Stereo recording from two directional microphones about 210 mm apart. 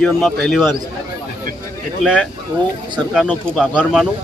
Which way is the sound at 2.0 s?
Centre (ahead or behind).